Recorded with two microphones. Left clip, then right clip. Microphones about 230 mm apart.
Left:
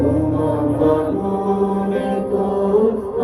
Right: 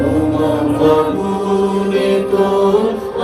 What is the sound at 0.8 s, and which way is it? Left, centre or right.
Music, right.